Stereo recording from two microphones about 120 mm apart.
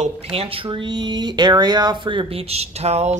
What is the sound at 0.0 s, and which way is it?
Speech, 55° right (ahead or behind).